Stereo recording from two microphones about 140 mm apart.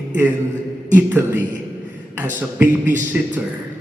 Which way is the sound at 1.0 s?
15° right (ahead or behind).